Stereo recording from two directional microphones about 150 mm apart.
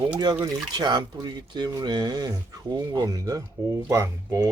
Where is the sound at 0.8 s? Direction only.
25° right (ahead or behind).